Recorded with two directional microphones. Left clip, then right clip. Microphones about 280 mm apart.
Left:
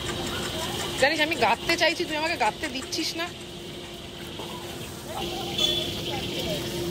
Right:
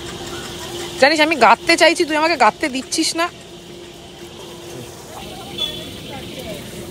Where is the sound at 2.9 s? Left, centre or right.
Right.